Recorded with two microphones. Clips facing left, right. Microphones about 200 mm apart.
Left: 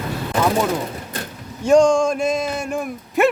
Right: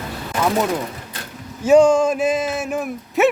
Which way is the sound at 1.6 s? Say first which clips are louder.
Right 1 dB; 5° right (ahead or behind).